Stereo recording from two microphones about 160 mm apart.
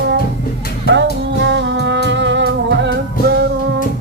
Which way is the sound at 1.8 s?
90° right.